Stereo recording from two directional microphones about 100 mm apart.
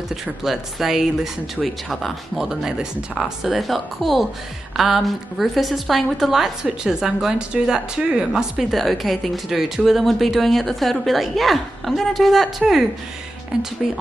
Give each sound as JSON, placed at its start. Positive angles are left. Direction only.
{"t": 0.1, "sound": "a woman's voice", "side_deg": -5}